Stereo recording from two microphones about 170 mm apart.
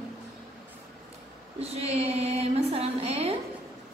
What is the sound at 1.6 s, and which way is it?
A woman's voice, 35° right (ahead or behind).